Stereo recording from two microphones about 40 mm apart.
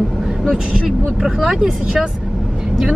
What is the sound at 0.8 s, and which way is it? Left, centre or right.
Speech, centre.